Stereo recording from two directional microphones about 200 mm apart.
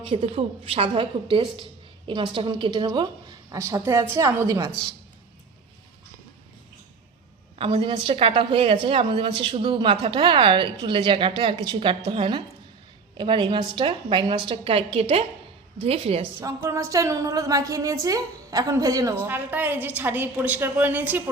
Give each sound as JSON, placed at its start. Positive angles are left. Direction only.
{"t": 0.0, "sound": "a woman's voice", "side_deg": -30}
{"t": 7.6, "sound": "a woman's voice", "side_deg": -25}
{"t": 16.4, "sound": "a woman's voice", "side_deg": -15}